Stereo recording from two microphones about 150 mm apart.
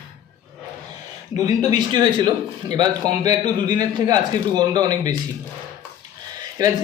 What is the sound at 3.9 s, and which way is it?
Speech, 25° right (ahead or behind).